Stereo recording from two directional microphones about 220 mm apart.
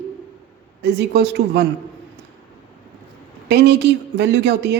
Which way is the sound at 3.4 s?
50° right (ahead or behind).